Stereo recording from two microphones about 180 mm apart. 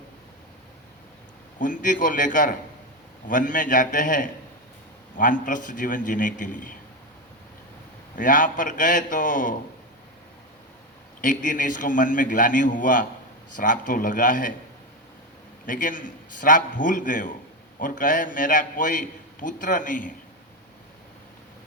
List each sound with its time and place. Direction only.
1.5 s a man's voice: 45° left (ahead or behind)
8.1 s a man's voice: 50° left (ahead or behind)
11.2 s a man's voice: 45° left (ahead or behind)
15.6 s a man's voice: 45° left (ahead or behind)